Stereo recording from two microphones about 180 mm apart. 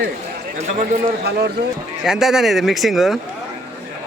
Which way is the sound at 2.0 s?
5° right (ahead or behind).